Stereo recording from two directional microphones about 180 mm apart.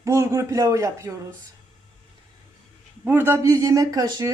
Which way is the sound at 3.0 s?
10° right (ahead or behind).